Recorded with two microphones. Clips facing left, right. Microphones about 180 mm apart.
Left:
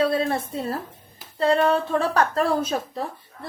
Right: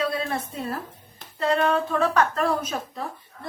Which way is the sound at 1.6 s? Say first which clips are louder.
Left 1 dB; 35° left (ahead or behind).